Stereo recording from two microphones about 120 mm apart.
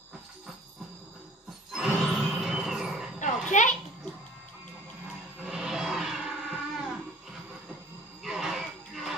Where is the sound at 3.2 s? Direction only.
90° left.